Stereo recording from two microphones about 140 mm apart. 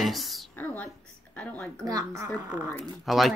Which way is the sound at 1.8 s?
25° right (ahead or behind).